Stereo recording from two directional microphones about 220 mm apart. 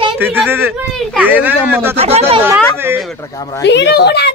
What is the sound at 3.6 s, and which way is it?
Speech, 50° left (ahead or behind).